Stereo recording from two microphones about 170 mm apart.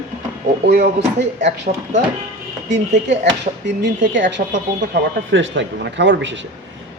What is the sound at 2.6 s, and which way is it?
Speech, 90° right.